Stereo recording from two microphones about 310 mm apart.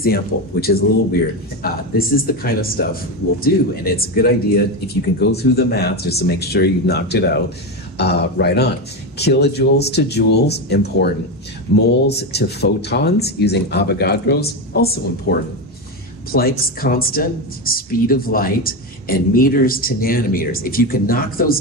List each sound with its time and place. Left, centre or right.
0.0 s speech: left